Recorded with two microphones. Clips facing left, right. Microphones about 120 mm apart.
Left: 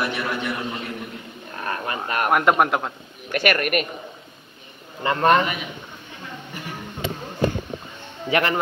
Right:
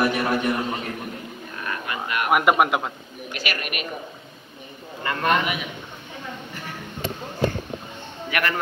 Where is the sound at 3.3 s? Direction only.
55° left (ahead or behind).